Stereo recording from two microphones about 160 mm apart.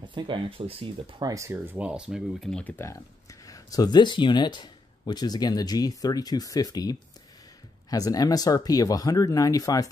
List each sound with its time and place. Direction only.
0.0 s speech: 30° right (ahead or behind)
1.3 s speech: 15° right (ahead or behind); by 9.8 s 20° left (ahead or behind)